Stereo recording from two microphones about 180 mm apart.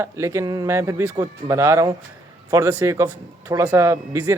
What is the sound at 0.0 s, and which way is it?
A man's voice, 15° right (ahead or behind).